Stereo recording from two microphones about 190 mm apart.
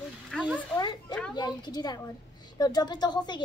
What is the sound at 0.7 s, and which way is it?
Children playing, 20° left (ahead or behind).